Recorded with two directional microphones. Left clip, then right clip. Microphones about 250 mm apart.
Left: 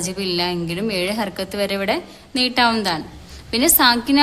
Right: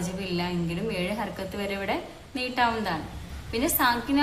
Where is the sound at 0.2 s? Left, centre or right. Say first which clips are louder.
Left 10 dB; left.